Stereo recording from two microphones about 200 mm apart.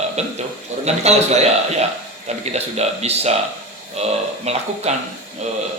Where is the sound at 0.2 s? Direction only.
35° right (ahead or behind).